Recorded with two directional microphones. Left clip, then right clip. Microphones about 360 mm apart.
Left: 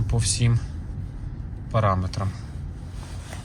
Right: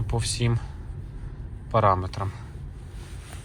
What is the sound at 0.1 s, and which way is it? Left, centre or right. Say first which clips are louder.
Speech: left 1 dB; centre.